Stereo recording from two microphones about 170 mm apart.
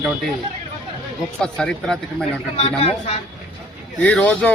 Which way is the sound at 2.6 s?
35° left (ahead or behind).